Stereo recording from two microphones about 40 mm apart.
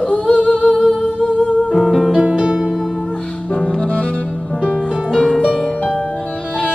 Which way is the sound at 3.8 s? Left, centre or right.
Left.